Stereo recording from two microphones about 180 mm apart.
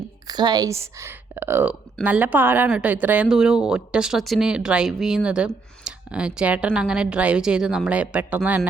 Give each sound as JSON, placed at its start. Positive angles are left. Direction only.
{"t": 0.3, "sound": "speech", "side_deg": -20}